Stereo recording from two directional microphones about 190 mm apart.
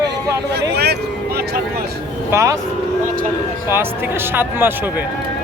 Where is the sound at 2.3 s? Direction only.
15° right (ahead or behind).